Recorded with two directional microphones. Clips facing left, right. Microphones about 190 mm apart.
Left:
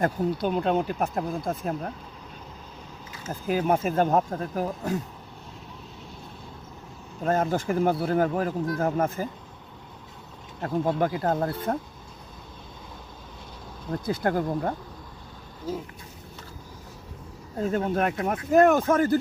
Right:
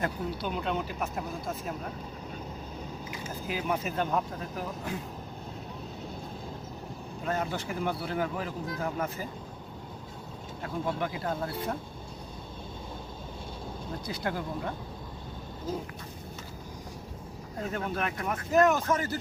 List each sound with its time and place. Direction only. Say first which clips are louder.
0.0 s speech: left 7 dB; 45° left (ahead or behind)
3.2 s speech: left 8 dB; 45° left (ahead or behind)
7.3 s speech: left 8 dB; 45° left (ahead or behind)
10.6 s speech: left 7 dB; 45° left (ahead or behind)
14.0 s speech: left 9 dB; 50° left (ahead or behind)
17.7 s speech: left 8 dB; 40° left (ahead or behind)